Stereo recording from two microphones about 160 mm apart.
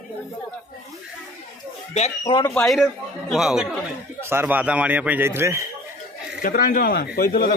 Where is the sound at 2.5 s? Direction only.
Centre (ahead or behind).